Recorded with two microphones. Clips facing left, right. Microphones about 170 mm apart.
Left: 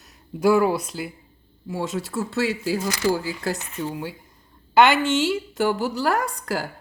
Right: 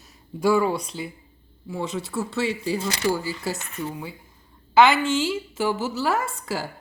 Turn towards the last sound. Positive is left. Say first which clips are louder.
# left 2 dB
turn(degrees=0)  # may be behind; listen again after turning